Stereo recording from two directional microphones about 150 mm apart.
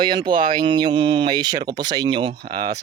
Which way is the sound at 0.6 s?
30° right (ahead or behind).